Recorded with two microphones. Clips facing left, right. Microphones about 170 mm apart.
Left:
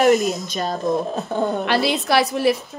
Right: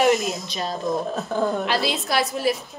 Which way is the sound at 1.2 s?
20° left (ahead or behind).